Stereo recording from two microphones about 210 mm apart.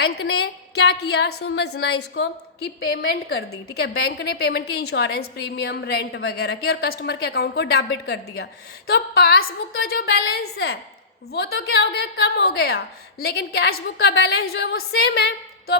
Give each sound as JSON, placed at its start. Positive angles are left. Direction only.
{"t": 0.0, "sound": "a woman's voice", "side_deg": 50}